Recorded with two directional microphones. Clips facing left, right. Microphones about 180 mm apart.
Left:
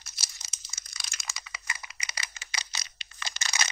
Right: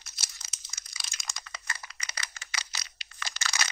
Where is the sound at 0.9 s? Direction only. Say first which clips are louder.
Even; centre (ahead or behind).